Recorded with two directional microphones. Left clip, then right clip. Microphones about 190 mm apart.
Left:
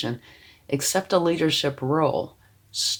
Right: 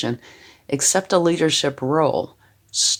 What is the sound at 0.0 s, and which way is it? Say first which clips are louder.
Speech: right 4 dB; 35° right (ahead or behind).